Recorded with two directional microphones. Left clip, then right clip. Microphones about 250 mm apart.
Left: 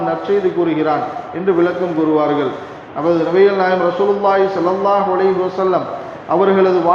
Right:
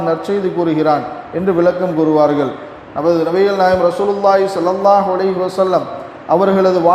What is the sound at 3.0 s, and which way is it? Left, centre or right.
A man's voice, right.